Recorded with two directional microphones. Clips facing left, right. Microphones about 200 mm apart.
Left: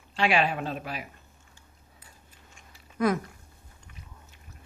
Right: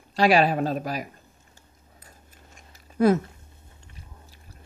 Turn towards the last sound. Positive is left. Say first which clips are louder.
# right 6 dB
turn(degrees=-30)  # may be behind; listen again after turning